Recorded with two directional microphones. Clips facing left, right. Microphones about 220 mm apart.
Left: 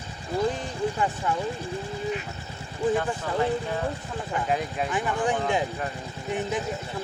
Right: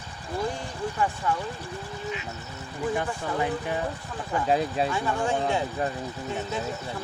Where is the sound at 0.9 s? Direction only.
20° left (ahead or behind).